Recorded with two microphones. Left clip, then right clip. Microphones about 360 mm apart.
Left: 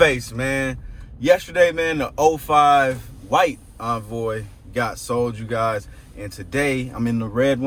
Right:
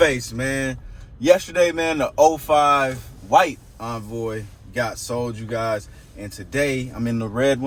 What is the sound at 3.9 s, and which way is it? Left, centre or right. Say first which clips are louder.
Speech: left 4 dB; centre.